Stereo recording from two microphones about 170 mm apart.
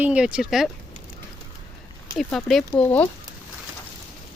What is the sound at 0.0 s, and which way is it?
Speech, 5° right (ahead or behind).